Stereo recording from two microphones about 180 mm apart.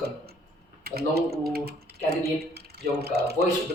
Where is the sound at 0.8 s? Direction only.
60° right (ahead or behind).